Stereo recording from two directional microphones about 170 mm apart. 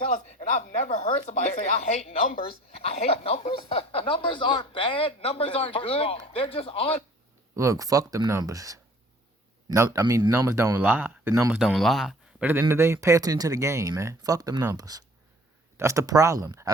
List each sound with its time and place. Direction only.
0.0 s a sound: 40° left (ahead or behind)
0.9 s speech: 40° left (ahead or behind)
7.5 s speech: 20° right (ahead or behind)
11.6 s speech: centre (ahead or behind)
12.5 s speech: 15° right (ahead or behind)